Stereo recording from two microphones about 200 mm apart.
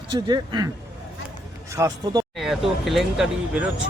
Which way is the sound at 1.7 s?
15° right (ahead or behind).